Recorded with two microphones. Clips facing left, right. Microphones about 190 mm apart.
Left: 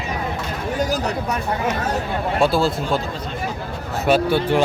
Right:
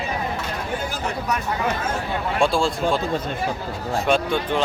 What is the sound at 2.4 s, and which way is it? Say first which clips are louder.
Speech: left 2 dB; 5° left (ahead or behind).